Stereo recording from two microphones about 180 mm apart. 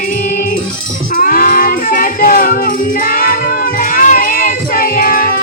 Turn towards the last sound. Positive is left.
turn(degrees=55)  # may be behind; listen again after turning